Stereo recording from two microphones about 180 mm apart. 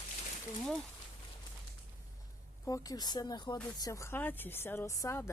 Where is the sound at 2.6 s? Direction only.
20° left (ahead or behind).